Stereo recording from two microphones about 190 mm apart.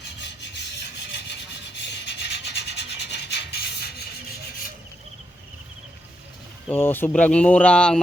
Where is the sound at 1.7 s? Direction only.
65° left (ahead or behind).